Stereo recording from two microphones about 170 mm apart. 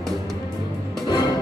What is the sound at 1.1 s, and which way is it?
Music, 25° left (ahead or behind).